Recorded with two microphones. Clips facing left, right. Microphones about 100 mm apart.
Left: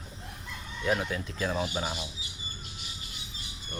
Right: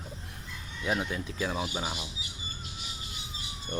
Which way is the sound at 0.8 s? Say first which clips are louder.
Left 2 dB; 15° right (ahead or behind).